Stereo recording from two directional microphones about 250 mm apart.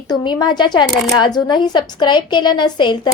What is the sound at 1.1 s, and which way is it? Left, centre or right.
A woman's voice, centre.